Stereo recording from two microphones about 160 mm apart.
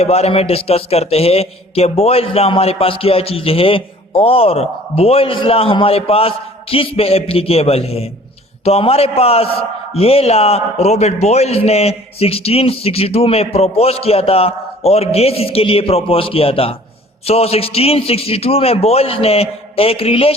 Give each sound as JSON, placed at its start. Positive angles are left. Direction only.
{"t": 0.0, "sound": "a man's voice", "side_deg": 40}